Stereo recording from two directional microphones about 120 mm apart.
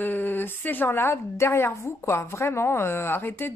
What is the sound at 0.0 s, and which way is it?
A woman's voice, 15° left (ahead or behind).